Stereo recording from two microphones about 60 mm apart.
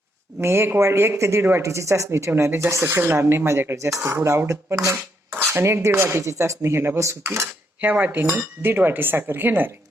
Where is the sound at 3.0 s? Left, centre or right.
Right.